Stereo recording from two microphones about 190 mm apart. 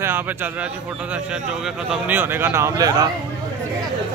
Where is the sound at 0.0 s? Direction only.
10° right (ahead or behind).